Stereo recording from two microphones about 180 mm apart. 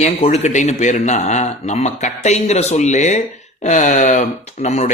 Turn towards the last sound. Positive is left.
turn(degrees=40)  # may be behind; listen again after turning